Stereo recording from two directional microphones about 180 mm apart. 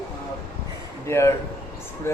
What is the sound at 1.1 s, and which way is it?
Speech, 15° left (ahead or behind).